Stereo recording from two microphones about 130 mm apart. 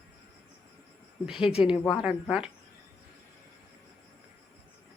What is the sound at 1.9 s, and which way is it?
Speech, centre (ahead or behind).